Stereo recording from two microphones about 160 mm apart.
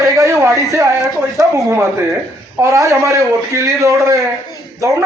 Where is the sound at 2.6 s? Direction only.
20° right (ahead or behind).